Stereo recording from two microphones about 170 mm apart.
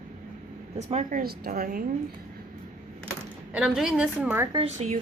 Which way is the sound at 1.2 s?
65° right (ahead or behind).